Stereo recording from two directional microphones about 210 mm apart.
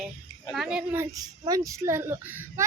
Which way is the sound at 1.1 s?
15° right (ahead or behind).